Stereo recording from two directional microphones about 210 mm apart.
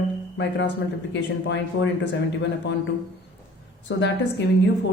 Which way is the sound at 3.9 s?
60° left (ahead or behind).